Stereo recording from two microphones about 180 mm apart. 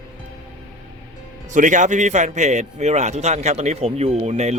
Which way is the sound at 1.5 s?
45° right (ahead or behind).